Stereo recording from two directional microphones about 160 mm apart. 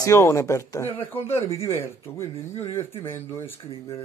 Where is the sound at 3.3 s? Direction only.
15° left (ahead or behind).